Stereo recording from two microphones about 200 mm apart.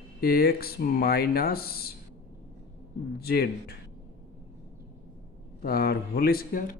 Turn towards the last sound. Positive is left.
turn(degrees=45)  # may be behind; listen again after turning